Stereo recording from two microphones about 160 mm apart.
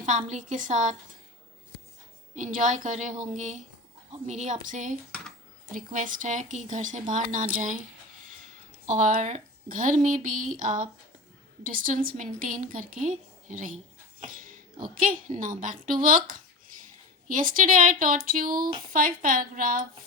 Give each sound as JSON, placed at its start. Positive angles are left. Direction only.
{"t": 0.0, "sound": "a woman's voice", "side_deg": -50}
{"t": 2.3, "sound": "a woman's voice", "side_deg": -50}
{"t": 8.9, "sound": "a woman's voice", "side_deg": -50}
{"t": 14.8, "sound": "a woman's voice", "side_deg": -60}